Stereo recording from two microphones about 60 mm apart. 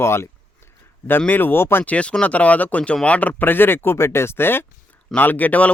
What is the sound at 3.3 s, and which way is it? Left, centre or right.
Speech, left.